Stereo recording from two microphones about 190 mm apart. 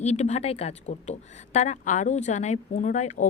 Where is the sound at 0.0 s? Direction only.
35° left (ahead or behind).